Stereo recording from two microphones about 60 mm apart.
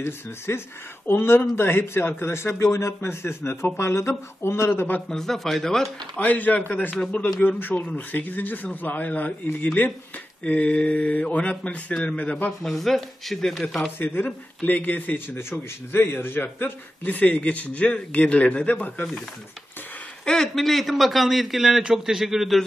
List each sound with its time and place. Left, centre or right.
0.5 s a man's voice: left
4.6 s a man's voice: left
5.0 s a man's voice: centre
6.1 s a man's voice: left
12.2 s speech: left
12.6 s a man's voice: centre
13.9 s speech: left
20.2 s a man's voice: centre